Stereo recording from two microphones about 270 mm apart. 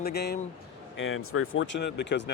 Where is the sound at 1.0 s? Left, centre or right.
Left.